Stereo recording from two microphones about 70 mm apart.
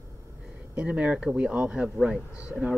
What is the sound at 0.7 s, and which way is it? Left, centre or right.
Speech, centre.